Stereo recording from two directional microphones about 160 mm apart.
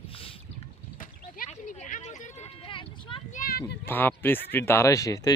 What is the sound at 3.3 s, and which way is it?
Children playing, 70° left (ahead or behind).